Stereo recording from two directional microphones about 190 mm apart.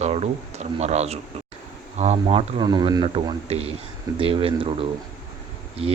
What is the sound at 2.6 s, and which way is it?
Speech, 20° right (ahead or behind).